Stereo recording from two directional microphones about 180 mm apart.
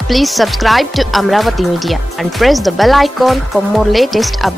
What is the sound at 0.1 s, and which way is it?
A woman's voice, centre (ahead or behind).